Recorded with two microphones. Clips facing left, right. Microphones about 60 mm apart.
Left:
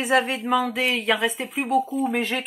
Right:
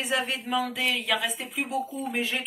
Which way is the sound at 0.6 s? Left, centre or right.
Left.